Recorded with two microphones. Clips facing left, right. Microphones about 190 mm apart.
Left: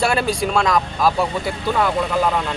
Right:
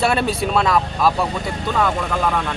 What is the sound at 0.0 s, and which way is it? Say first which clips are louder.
A man's voice: even; centre (ahead or behind).